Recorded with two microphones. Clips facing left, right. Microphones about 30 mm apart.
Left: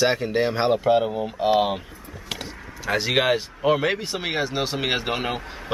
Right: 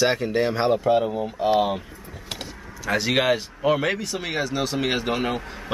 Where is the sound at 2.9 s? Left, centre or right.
Centre.